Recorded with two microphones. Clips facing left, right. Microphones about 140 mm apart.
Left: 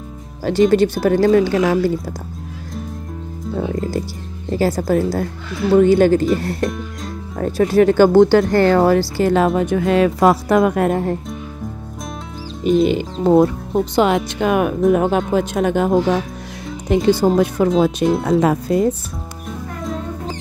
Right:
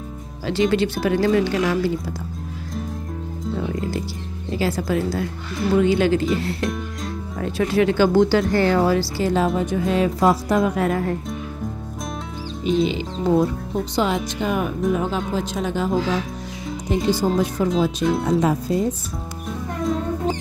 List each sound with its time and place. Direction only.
0.5 s speech: 45° left (ahead or behind)
4.6 s speech: 45° left (ahead or behind)
7.3 s speech: 45° left (ahead or behind)
12.6 s speech: 50° left (ahead or behind)